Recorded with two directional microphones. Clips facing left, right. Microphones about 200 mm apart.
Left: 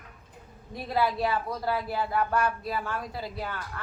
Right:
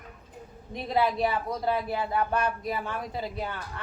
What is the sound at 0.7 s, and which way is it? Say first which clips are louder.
A woman's voice: right 1 dB; 20° right (ahead or behind).